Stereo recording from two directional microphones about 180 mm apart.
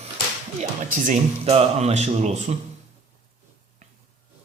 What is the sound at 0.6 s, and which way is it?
Speech, 45° right (ahead or behind).